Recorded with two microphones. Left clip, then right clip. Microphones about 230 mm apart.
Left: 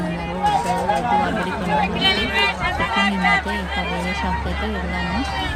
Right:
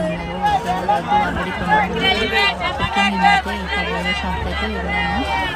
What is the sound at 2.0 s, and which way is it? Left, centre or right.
Speech, right.